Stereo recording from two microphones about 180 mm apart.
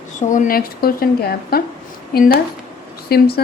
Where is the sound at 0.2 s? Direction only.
45° left (ahead or behind).